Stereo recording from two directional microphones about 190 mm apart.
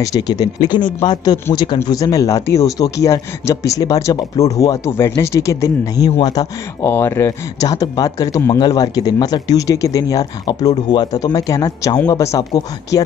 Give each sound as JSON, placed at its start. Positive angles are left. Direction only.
{"t": 0.0, "sound": "speech", "side_deg": 20}